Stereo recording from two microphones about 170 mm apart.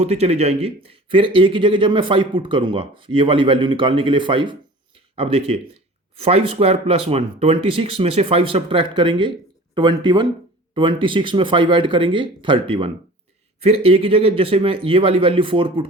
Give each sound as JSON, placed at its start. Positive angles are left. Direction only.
{"t": 0.0, "sound": "speech", "side_deg": -40}